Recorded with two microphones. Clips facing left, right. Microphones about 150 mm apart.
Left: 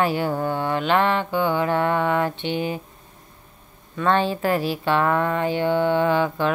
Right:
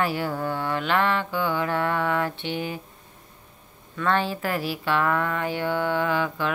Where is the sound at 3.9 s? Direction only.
25° left (ahead or behind).